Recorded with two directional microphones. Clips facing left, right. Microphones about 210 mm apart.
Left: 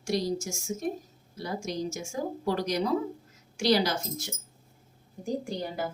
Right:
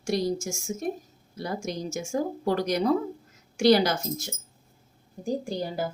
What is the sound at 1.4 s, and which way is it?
A woman's voice, 55° right (ahead or behind).